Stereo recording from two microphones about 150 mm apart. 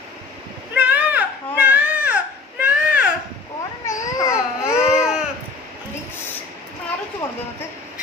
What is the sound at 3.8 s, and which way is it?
Baby cry, 20° left (ahead or behind).